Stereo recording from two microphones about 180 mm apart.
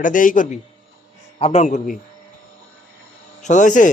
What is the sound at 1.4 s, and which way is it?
Speech, 35° left (ahead or behind).